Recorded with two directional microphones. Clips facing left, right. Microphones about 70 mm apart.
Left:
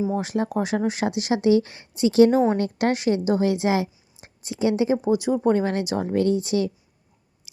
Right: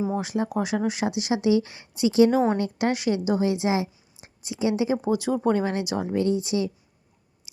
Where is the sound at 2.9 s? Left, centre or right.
Left.